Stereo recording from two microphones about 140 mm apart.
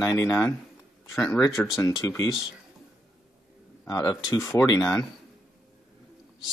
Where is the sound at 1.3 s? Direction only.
20° left (ahead or behind).